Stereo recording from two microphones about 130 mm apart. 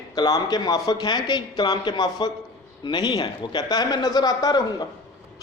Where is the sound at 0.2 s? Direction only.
30° left (ahead or behind).